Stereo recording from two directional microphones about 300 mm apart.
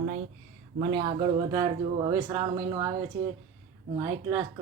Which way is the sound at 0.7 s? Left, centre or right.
Centre.